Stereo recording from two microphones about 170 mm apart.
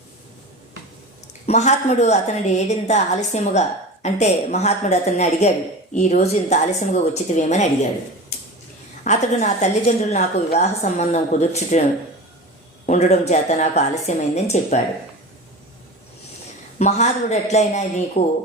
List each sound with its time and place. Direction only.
1.5 s a woman's voice: 40° left (ahead or behind)
9.0 s a woman's voice: 45° left (ahead or behind)
12.8 s a woman's voice: 40° left (ahead or behind)
16.7 s a woman's voice: 45° left (ahead or behind)